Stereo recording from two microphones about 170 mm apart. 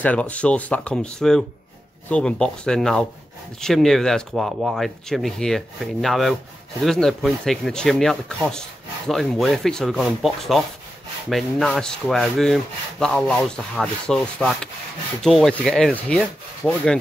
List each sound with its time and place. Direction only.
0.0 s speech: 10° left (ahead or behind)
16.1 s rub: 5° left (ahead or behind)